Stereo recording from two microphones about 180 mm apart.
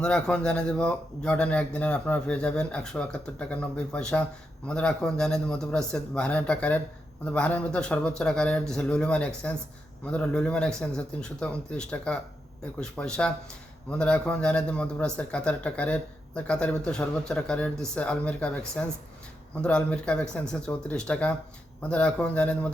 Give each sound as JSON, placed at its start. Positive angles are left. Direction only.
{"t": 0.0, "sound": "speech", "side_deg": 5}